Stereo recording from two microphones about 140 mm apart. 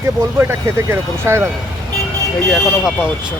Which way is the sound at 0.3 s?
15° right (ahead or behind).